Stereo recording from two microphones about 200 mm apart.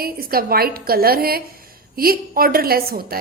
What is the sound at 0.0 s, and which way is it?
A woman's voice, 50° right (ahead or behind).